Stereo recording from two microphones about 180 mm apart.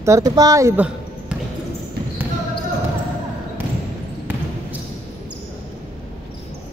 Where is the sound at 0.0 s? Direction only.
20° right (ahead or behind).